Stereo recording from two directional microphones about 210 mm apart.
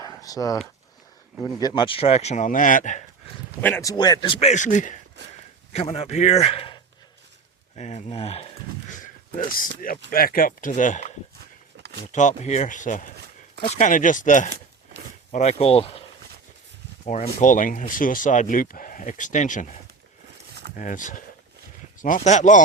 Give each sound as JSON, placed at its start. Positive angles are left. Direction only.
{"t": 0.0, "sound": "a sound", "side_deg": 15}
{"t": 1.6, "sound": "speech", "side_deg": 20}
{"t": 3.6, "sound": "a man's voice", "side_deg": 10}
{"t": 5.2, "sound": "speech", "side_deg": -55}
{"t": 5.7, "sound": "a man's voice", "side_deg": 30}
{"t": 7.8, "sound": "a man's voice", "side_deg": 30}
{"t": 10.1, "sound": "speech", "side_deg": 45}
{"t": 12.1, "sound": "a man's voice", "side_deg": 35}
{"t": 17.1, "sound": "speech", "side_deg": 35}
{"t": 20.5, "sound": "a sound", "side_deg": -50}
{"t": 20.7, "sound": "speech", "side_deg": 40}